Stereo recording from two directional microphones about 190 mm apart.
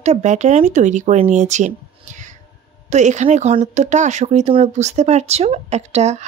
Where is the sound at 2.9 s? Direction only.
40° right (ahead or behind).